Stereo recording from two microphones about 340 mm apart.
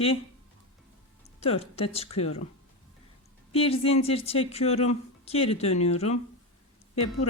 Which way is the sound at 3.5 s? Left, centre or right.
Centre.